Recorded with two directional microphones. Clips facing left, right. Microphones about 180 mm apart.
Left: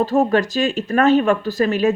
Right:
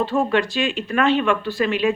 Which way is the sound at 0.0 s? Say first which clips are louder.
Left 3 dB; 40° left (ahead or behind).